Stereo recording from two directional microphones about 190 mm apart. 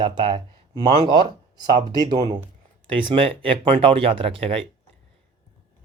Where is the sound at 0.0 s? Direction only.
25° right (ahead or behind).